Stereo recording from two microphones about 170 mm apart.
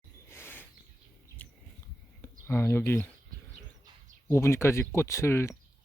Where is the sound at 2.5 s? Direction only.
15° left (ahead or behind).